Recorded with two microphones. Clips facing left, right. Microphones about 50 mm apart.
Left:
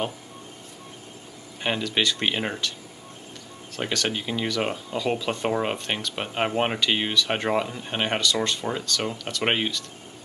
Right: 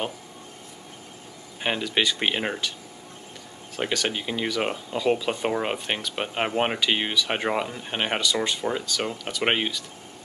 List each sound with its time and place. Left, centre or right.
1.6 s speech: centre
3.7 s speech: centre